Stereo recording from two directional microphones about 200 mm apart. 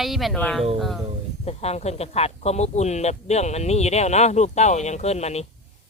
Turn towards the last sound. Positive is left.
turn(degrees=30)  # may be behind; listen again after turning